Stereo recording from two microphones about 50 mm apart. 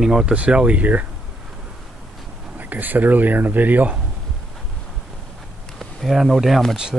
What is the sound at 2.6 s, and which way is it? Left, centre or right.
Speech, right.